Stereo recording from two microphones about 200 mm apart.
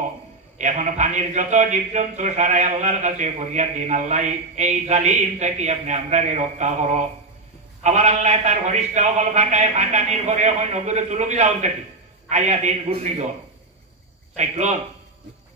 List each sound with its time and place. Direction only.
0.6 s a man's voice: 35° right (ahead or behind)
14.3 s a man's voice: 35° right (ahead or behind)